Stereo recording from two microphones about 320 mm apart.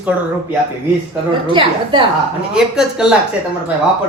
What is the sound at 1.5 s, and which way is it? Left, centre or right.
Speech, centre.